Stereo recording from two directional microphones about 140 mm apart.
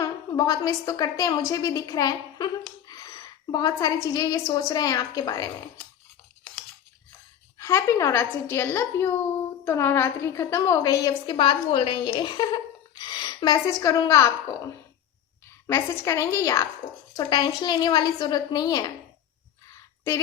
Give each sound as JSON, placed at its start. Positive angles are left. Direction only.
{"t": 0.0, "sound": "a woman's voice", "side_deg": 25}
{"t": 2.8, "sound": "a sound", "side_deg": 25}
{"t": 3.5, "sound": "a woman's voice", "side_deg": 25}
{"t": 7.6, "sound": "a woman's voice", "side_deg": 20}